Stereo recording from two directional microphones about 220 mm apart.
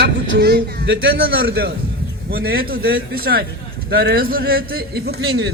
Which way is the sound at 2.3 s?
45° right (ahead or behind).